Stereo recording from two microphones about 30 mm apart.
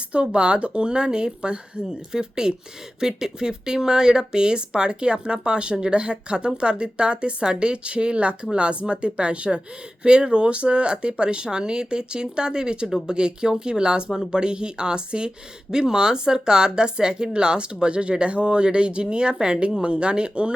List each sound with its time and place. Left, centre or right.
0.3 s speech: right
19.8 s speech: right